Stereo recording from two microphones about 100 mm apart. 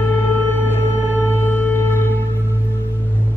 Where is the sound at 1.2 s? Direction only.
20° left (ahead or behind).